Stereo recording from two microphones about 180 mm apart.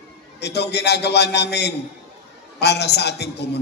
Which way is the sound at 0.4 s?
70° left (ahead or behind).